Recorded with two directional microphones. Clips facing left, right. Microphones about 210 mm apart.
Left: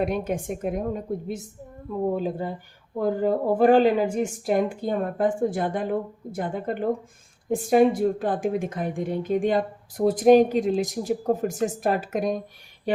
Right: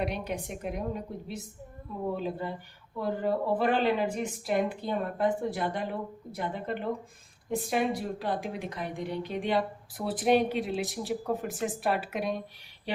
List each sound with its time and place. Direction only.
0.0 s a woman's voice: 50° left (ahead or behind)
2.0 s a woman's voice: 45° left (ahead or behind)